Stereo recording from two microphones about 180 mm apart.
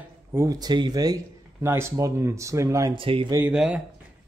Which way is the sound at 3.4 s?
5° right (ahead or behind).